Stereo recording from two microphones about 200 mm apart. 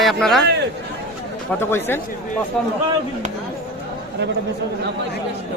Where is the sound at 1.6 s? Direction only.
10° left (ahead or behind).